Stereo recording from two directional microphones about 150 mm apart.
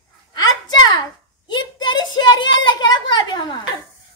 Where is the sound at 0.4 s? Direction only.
25° left (ahead or behind).